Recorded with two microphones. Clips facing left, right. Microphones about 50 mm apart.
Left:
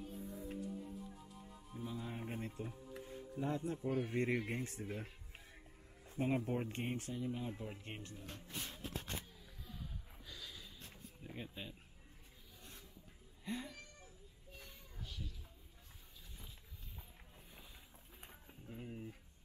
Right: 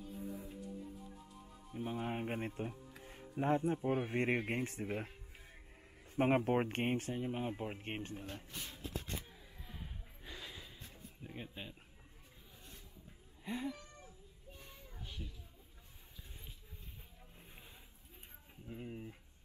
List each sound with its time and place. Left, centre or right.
0.1 s music: centre
1.8 s music: right
3.1 s speech: right
8.5 s a sound: left
9.7 s a sound: right
11.2 s speech: centre
13.4 s speech: centre
15.0 s a sound: right
18.5 s speech: centre